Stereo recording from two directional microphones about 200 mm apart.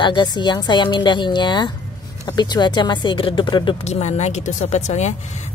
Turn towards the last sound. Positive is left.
turn(degrees=35)  # may be behind; listen again after turning